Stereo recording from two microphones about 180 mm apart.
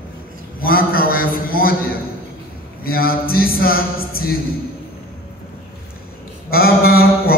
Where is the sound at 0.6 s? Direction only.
55° left (ahead or behind).